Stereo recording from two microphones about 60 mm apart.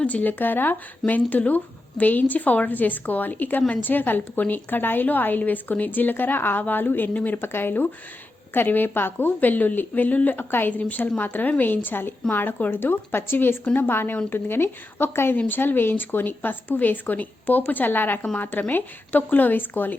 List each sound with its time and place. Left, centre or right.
0.0 s a woman's voice: left
7.1 s speech: left
7.4 s a woman's voice: left